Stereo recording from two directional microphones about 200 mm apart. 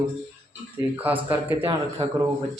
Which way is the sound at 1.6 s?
20° right (ahead or behind).